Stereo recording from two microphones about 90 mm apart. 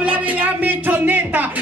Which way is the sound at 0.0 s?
15° right (ahead or behind).